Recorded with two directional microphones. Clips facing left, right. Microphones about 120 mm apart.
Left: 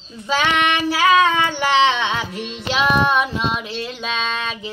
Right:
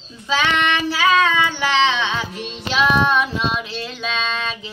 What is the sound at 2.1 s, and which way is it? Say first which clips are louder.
Music: left 1 dB; 60° left (ahead or behind).